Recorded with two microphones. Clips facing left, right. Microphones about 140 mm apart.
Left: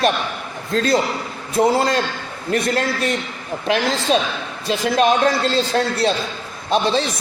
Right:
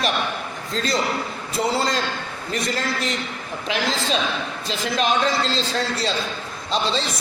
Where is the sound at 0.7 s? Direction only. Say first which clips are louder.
Left 5 dB; 55° left (ahead or behind).